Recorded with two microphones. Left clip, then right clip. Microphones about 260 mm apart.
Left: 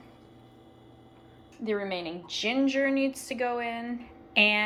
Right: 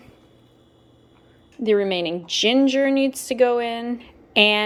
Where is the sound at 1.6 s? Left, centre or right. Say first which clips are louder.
Right 11 dB; right.